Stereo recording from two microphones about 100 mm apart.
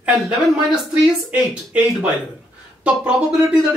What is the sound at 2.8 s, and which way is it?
Speech, 10° right (ahead or behind).